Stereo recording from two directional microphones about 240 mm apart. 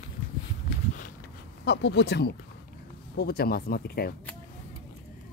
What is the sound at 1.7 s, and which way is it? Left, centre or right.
Speech, left.